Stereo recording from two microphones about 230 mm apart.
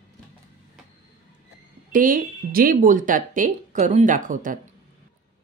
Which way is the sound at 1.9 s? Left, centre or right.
Right.